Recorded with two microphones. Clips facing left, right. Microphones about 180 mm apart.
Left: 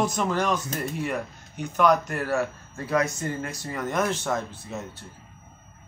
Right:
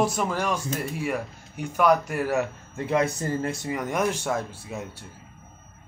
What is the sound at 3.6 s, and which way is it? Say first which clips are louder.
Speech: left 2 dB; 10° right (ahead or behind).